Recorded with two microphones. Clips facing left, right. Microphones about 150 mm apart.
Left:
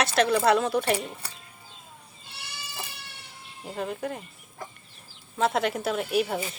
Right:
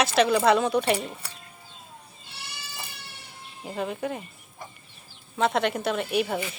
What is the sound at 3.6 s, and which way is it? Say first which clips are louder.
Speech: right 2 dB; centre (ahead or behind).